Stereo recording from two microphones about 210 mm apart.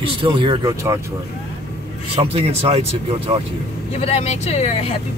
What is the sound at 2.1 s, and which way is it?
Speech, 30° right (ahead or behind).